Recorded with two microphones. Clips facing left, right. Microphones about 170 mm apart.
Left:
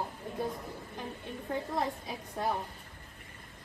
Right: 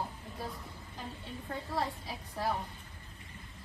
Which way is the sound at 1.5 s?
20° left (ahead or behind).